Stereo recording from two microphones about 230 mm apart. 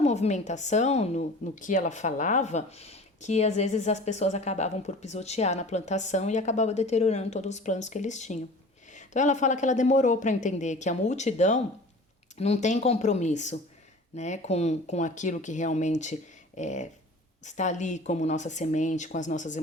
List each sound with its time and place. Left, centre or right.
0.0 s speech: left